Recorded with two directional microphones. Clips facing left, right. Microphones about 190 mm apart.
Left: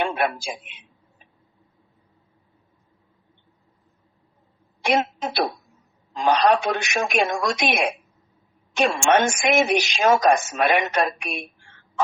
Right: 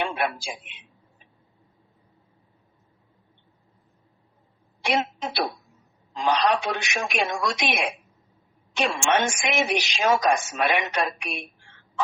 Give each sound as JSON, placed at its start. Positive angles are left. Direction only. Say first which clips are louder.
{"t": 0.0, "sound": "a man's voice", "louder": "left 3 dB", "side_deg": 45}
{"t": 4.8, "sound": "a woman's voice", "louder": "left 4 dB", "side_deg": 45}